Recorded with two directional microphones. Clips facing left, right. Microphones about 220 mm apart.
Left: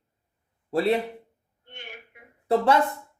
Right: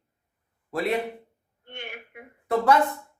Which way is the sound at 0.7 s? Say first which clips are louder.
Left 4 dB; 30° left (ahead or behind).